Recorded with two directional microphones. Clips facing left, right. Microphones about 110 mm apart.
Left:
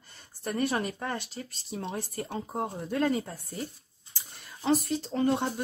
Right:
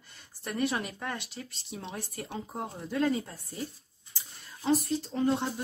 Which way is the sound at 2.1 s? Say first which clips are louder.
Left 3 dB; 45° left (ahead or behind).